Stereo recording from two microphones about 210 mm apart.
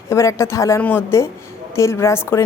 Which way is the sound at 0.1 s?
15° left (ahead or behind).